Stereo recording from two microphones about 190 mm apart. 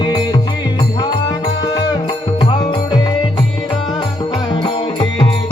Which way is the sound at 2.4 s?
25° left (ahead or behind).